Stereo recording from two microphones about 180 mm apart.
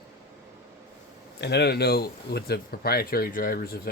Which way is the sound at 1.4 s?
70° left (ahead or behind).